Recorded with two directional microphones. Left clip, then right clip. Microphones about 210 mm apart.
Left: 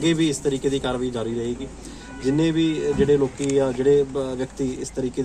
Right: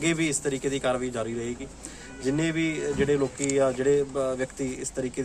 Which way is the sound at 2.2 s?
25° right (ahead or behind).